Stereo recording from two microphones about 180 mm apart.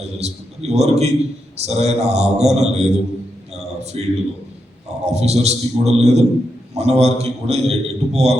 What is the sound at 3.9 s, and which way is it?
A man's voice, 35° right (ahead or behind).